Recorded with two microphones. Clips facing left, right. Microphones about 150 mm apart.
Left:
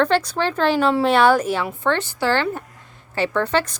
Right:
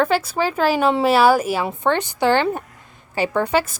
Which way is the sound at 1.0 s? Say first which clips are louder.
Right 1 dB; 5° right (ahead or behind).